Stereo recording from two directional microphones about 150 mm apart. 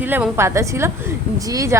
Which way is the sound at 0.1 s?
15° right (ahead or behind).